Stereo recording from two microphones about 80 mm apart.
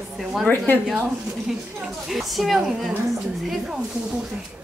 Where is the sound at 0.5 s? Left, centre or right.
Left.